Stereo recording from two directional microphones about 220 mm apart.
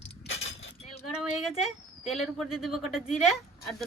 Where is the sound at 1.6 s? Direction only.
Centre (ahead or behind).